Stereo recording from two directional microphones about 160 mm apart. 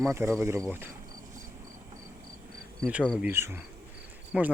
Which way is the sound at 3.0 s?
5° right (ahead or behind).